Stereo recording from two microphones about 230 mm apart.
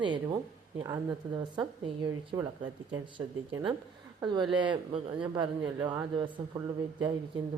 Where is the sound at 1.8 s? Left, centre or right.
Centre.